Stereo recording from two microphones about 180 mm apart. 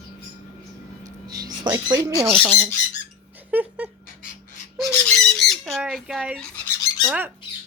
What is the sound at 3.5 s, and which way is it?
Speech, 10° right (ahead or behind).